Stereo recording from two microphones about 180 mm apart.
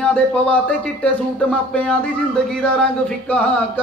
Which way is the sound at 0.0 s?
10° left (ahead or behind).